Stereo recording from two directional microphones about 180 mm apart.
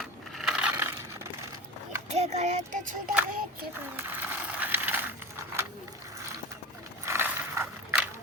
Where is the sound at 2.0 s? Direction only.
40° right (ahead or behind).